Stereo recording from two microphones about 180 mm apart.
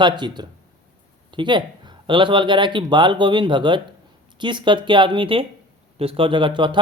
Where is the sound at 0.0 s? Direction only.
25° right (ahead or behind).